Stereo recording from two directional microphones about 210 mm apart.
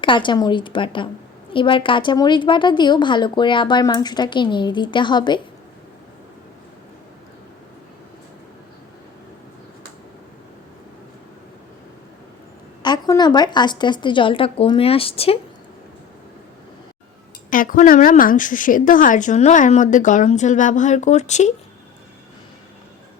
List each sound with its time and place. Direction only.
0.0 s a woman's voice: 20° left (ahead or behind)
12.8 s a woman's voice: 20° left (ahead or behind)
17.5 s a woman's voice: 40° left (ahead or behind)